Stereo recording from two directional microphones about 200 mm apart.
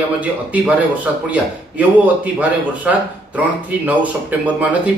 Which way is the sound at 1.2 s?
5° right (ahead or behind).